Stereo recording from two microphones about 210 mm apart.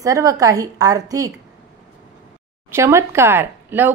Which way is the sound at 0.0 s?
15° right (ahead or behind).